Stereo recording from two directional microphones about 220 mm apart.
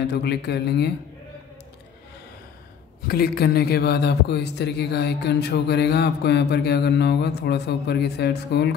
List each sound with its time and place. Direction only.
0.1 s a man's voice: 50° left (ahead or behind)
3.1 s a man's voice: 45° left (ahead or behind)